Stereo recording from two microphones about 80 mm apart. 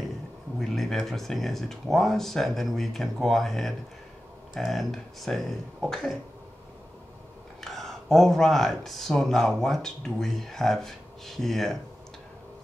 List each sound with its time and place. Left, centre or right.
0.6 s speech: centre
7.6 s speech: centre